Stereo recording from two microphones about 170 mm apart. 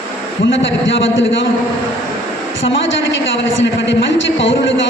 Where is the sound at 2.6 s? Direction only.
90° left.